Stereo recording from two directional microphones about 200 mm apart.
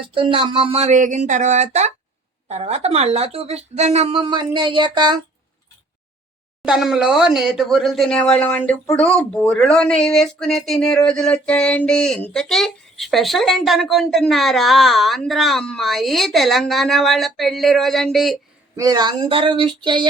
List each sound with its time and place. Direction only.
0.1 s speech: 25° right (ahead or behind)
6.6 s speech: centre (ahead or behind)
18.8 s speech: 20° right (ahead or behind)